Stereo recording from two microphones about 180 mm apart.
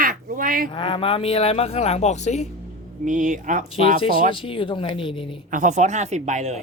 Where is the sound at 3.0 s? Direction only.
45° right (ahead or behind).